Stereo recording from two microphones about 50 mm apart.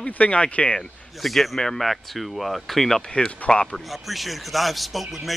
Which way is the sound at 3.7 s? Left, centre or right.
Centre.